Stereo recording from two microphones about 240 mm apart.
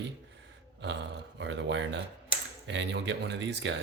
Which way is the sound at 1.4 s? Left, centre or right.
Right.